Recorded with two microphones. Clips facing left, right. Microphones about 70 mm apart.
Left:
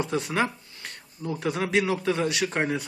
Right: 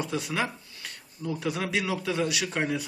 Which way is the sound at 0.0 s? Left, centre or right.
Left.